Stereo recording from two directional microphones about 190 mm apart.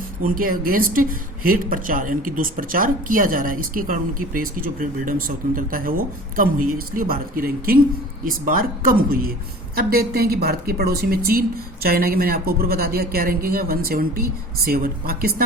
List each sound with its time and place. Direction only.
0.2 s a woman's voice: 45° right (ahead or behind)